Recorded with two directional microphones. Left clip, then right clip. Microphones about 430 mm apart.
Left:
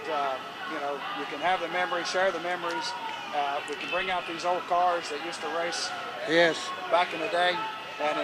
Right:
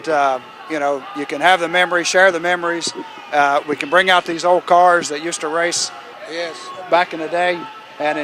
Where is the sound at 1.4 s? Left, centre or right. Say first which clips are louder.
Right 14 dB; right.